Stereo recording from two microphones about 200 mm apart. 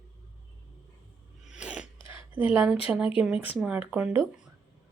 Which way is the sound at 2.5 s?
5° right (ahead or behind).